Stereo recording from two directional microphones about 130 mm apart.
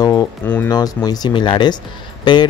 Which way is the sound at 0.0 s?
30° left (ahead or behind).